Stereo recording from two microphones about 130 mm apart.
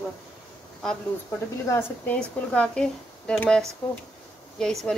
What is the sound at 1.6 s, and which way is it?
Speech, 20° left (ahead or behind).